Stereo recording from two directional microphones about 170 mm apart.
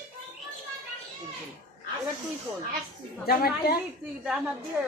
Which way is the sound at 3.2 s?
65° left (ahead or behind).